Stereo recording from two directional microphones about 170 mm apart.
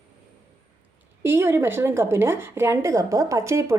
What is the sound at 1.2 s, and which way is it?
A woman's voice, 15° right (ahead or behind).